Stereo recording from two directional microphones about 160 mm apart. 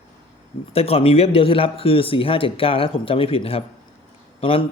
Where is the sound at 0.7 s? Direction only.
40° left (ahead or behind).